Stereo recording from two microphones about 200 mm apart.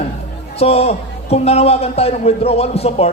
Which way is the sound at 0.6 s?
30° left (ahead or behind).